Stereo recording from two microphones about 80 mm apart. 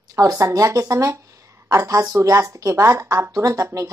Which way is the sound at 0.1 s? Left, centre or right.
Right.